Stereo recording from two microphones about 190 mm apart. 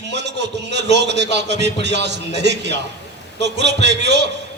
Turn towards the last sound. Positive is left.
turn(degrees=-65)  # may be behind; listen again after turning